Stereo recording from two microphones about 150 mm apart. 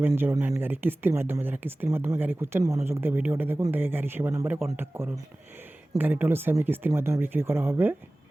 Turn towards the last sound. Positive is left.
turn(degrees=-15)  # may be behind; listen again after turning